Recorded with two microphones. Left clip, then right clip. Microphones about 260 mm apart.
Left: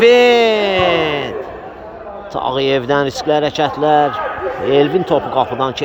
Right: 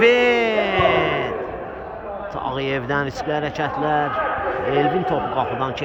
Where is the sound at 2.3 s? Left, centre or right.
Left.